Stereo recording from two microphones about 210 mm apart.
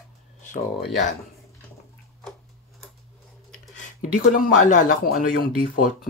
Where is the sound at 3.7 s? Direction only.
40° left (ahead or behind).